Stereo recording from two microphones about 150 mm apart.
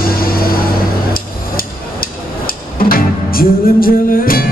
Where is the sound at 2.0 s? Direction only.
75° left (ahead or behind).